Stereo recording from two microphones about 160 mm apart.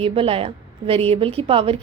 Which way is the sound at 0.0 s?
35° right (ahead or behind).